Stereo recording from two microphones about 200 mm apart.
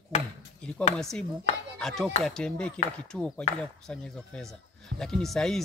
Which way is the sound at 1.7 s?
Centre (ahead or behind).